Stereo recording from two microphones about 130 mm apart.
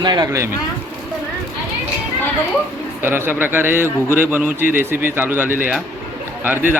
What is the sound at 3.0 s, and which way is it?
Speech, 15° right (ahead or behind).